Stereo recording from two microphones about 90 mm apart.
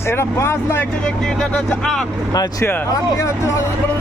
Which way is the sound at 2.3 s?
45° left (ahead or behind).